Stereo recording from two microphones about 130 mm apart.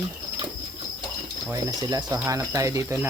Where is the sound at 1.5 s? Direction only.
25° right (ahead or behind).